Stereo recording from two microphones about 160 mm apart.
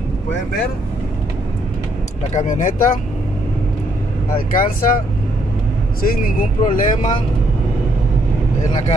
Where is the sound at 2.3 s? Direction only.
50° left (ahead or behind).